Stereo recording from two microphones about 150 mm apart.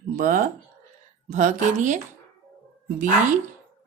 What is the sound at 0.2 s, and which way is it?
Speech, 60° right (ahead or behind).